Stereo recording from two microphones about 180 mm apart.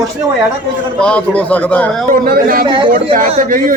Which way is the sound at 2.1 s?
55° right (ahead or behind).